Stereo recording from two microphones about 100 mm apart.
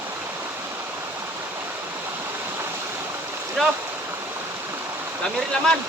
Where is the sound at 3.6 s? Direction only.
Centre (ahead or behind).